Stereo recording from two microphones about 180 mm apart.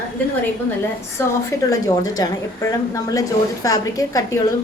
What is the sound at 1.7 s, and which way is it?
Speech, 20° left (ahead or behind).